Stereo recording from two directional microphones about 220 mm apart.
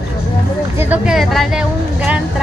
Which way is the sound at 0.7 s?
5° right (ahead or behind).